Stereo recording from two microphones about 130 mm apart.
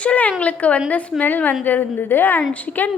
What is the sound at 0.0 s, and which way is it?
A woman's voice, 10° left (ahead or behind).